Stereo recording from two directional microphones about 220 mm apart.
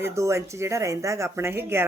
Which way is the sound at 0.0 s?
15° right (ahead or behind).